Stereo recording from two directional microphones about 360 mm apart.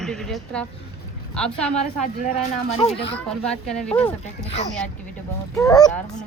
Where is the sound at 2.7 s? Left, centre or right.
Centre.